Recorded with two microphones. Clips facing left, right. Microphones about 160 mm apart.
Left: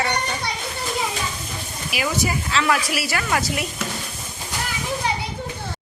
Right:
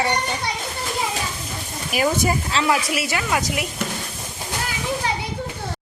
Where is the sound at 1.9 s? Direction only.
45° right (ahead or behind).